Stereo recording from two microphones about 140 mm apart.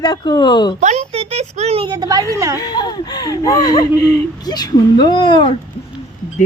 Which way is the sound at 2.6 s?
30° left (ahead or behind).